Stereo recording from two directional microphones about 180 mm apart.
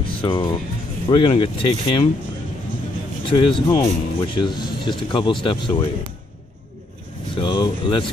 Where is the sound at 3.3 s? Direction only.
25° left (ahead or behind).